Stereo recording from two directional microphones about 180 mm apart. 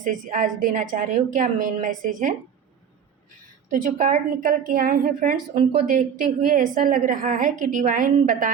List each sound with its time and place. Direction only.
0.0 s a woman's voice: 45° right (ahead or behind)
3.7 s a woman's voice: 45° right (ahead or behind)